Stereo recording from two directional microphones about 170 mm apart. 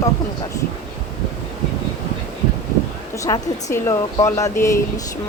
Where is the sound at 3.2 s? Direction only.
20° left (ahead or behind).